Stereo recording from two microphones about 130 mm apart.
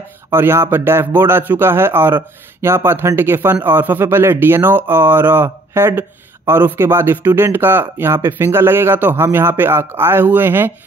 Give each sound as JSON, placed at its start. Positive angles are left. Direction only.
{"t": 0.3, "sound": "a man's voice", "side_deg": -20}